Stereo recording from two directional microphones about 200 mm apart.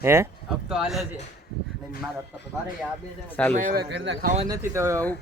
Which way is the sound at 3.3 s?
5° left (ahead or behind).